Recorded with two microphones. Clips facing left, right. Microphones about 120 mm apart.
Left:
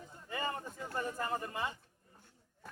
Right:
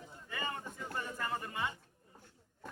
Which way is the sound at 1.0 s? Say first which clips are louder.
Left 3 dB; 30° left (ahead or behind).